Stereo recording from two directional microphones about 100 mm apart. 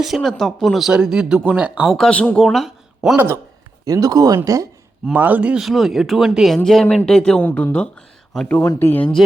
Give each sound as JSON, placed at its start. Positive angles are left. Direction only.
{"t": 0.0, "sound": "speech", "side_deg": 0}
{"t": 2.0, "sound": "speech", "side_deg": 10}
{"t": 2.5, "sound": "a sound", "side_deg": 0}
{"t": 3.8, "sound": "speech", "side_deg": -35}
{"t": 5.1, "sound": "speech", "side_deg": -15}
{"t": 5.6, "sound": "speech", "side_deg": 0}
{"t": 8.6, "sound": "speech", "side_deg": 20}